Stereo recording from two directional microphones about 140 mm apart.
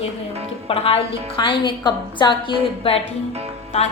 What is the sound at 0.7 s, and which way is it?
A woman's voice, 45° left (ahead or behind).